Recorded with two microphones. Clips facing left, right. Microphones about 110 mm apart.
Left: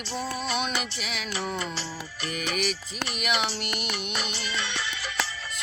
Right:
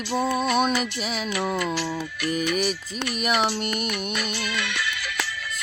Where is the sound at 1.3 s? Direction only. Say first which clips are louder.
Right 6 dB; 65° right (ahead or behind).